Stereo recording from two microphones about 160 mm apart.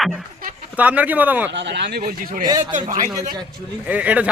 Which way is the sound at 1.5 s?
90° right.